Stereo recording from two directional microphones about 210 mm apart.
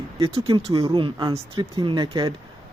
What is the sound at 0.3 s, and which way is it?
Speech, 25° right (ahead or behind).